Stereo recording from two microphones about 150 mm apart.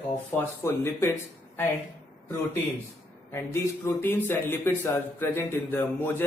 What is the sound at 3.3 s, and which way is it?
Speech, 15° left (ahead or behind).